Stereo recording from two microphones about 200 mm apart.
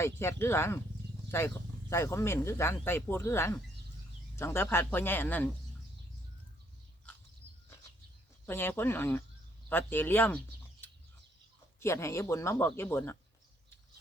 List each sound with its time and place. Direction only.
0.0 s speech: 10° left (ahead or behind)
7.4 s a sound: 65° right (ahead or behind)
8.4 s speech: 10° left (ahead or behind)